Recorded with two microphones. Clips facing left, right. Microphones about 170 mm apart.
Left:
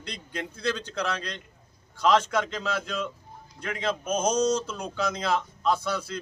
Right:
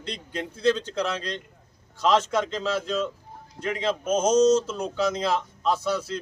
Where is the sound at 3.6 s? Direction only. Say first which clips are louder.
Right 3 dB; 30° right (ahead or behind).